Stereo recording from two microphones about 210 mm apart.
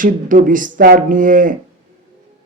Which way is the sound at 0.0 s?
40° right (ahead or behind).